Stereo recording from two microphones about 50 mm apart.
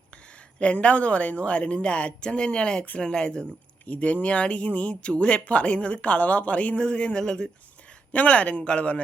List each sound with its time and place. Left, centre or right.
0.3 s speech: left
8.1 s speech: left